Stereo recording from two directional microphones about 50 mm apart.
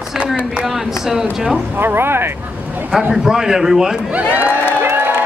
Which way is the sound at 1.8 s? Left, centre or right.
Right.